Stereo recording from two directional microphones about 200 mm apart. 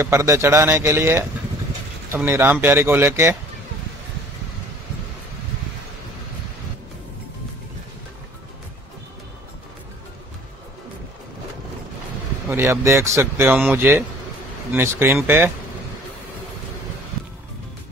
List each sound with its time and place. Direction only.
0.0 s a man's voice: 15° right (ahead or behind)
12.4 s a man's voice: 15° right (ahead or behind)